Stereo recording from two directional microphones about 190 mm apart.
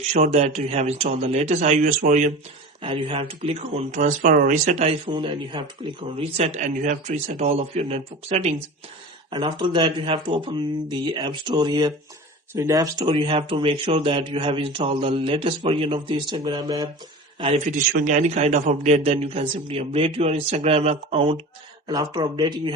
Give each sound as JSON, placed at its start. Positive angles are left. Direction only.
{"t": 0.1, "sound": "speech", "side_deg": -35}
{"t": 2.8, "sound": "speech", "side_deg": -30}
{"t": 9.3, "sound": "speech", "side_deg": -25}
{"t": 17.9, "sound": "speech", "side_deg": -40}
{"t": 21.8, "sound": "speech", "side_deg": -20}